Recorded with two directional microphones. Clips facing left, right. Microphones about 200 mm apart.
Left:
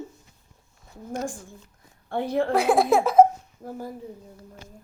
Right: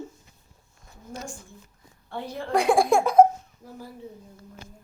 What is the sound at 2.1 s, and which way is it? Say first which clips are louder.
Speech: left 9 dB; 55° left (ahead or behind).